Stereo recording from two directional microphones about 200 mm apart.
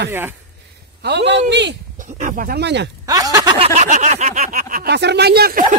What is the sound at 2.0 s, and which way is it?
Speech, 40° right (ahead or behind).